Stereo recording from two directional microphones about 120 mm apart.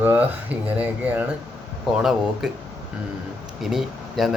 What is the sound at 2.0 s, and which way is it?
Speech, 5° right (ahead or behind).